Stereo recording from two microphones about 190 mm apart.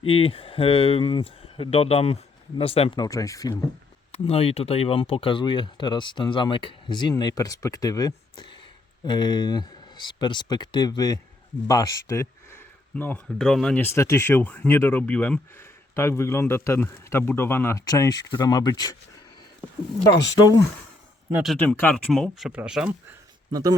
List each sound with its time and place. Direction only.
0.0 s speech: 30° left (ahead or behind)
4.1 s speech: 30° left (ahead or behind)
21.3 s speech: centre (ahead or behind)
21.6 s speech: 10° left (ahead or behind)
23.5 s speech: 20° right (ahead or behind)